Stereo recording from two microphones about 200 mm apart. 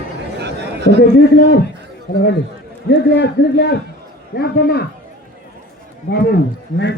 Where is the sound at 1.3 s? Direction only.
55° left (ahead or behind).